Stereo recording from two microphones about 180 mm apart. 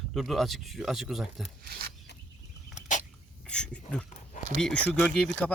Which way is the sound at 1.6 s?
55° right (ahead or behind).